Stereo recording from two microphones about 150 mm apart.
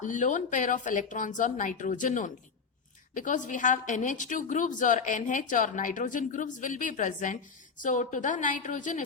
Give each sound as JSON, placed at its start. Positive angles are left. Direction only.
{"t": 0.0, "sound": "a woman's voice", "side_deg": 55}